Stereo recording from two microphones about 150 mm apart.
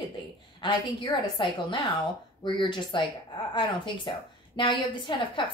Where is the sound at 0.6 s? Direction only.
30° left (ahead or behind).